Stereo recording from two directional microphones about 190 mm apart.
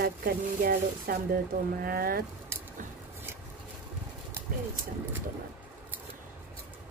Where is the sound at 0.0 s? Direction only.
50° right (ahead or behind).